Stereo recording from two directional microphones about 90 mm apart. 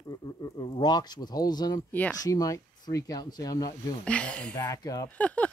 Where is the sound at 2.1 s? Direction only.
40° left (ahead or behind).